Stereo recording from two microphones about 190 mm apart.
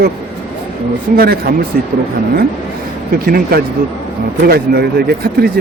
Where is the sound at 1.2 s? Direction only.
55° right (ahead or behind).